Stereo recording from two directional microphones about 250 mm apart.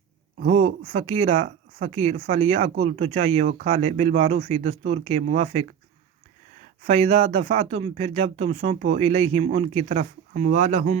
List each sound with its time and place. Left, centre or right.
0.3 s speech: right
6.8 s speech: right